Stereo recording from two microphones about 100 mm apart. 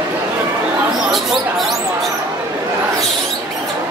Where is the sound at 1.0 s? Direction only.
Centre (ahead or behind).